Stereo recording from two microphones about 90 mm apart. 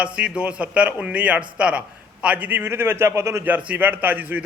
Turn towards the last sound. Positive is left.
turn(degrees=-20)  # may be behind; listen again after turning